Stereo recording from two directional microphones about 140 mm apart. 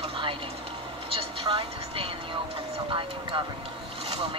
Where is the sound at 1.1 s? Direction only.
45° right (ahead or behind).